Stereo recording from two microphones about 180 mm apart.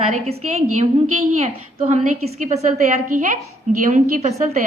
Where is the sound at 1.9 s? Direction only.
40° right (ahead or behind).